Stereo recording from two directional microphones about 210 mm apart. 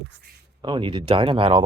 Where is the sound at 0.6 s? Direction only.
20° right (ahead or behind).